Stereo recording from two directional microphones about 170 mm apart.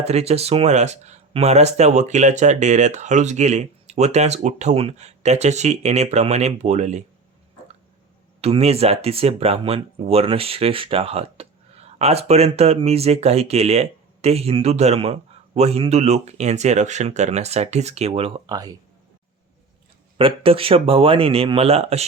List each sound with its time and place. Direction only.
0.0 s speech: 40° right (ahead or behind)
8.4 s speech: 35° right (ahead or behind)
18.5 s speech: 20° right (ahead or behind)
20.1 s speech: 30° right (ahead or behind)